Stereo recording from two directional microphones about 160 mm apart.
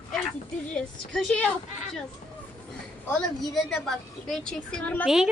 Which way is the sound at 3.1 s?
5° left (ahead or behind).